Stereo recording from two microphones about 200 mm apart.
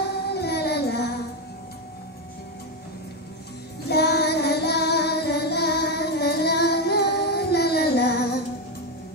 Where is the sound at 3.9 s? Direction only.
55° left (ahead or behind).